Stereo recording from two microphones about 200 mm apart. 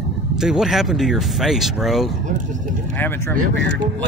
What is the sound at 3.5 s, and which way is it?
Speech, 65° right (ahead or behind).